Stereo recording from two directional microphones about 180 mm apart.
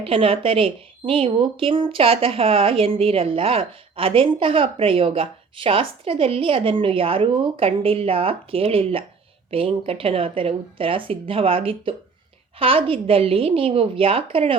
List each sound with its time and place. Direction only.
0.0 s a woman's voice: 30° right (ahead or behind)